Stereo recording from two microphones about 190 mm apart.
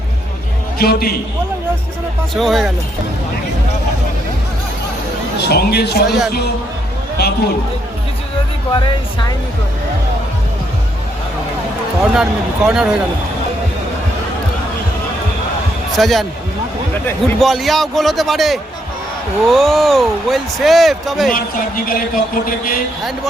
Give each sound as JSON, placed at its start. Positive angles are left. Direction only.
{"t": 0.8, "sound": "a sound", "side_deg": 55}
{"t": 2.3, "sound": "speech", "side_deg": 0}
{"t": 5.4, "sound": "speech", "side_deg": 60}
{"t": 6.1, "sound": "speech", "side_deg": 0}
{"t": 7.2, "sound": "speech", "side_deg": 55}
{"t": 8.7, "sound": "speech", "side_deg": 20}
{"t": 12.1, "sound": "speech", "side_deg": -5}
{"t": 16.0, "sound": "speech", "side_deg": 0}
{"t": 21.8, "sound": "a sound", "side_deg": 50}